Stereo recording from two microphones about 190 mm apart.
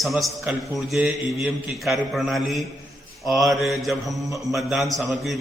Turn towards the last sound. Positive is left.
turn(degrees=0)  # may be behind; listen again after turning